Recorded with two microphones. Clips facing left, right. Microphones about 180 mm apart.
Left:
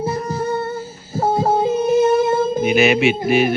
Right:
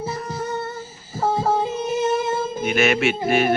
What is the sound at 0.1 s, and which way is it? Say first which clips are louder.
Music: left 6 dB; 50° left (ahead or behind).